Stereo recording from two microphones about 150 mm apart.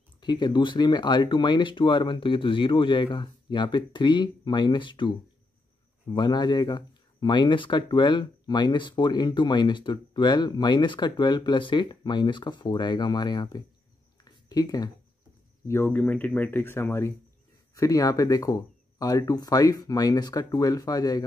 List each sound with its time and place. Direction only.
0.2 s speech: 30° left (ahead or behind)
14.2 s a sound: 25° left (ahead or behind)
15.6 s speech: 15° left (ahead or behind)